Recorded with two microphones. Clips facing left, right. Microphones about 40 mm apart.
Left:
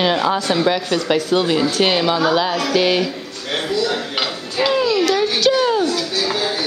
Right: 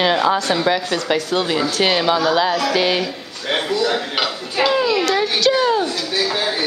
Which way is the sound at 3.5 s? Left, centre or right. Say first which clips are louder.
Right 1 dB; centre.